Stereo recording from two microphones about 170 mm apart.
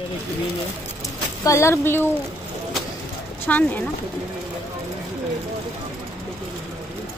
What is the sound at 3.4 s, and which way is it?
Speech, 10° left (ahead or behind).